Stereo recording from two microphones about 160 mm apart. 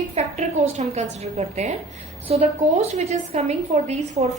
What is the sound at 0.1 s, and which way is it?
A woman's voice, 45° right (ahead or behind).